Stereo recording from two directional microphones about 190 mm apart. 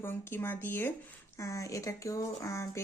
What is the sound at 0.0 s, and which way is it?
Speech, 10° left (ahead or behind).